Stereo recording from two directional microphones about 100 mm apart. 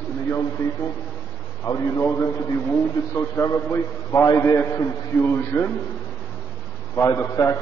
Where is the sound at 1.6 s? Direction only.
45° left (ahead or behind).